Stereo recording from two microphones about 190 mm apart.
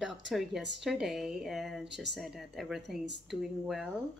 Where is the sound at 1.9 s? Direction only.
65° right (ahead or behind).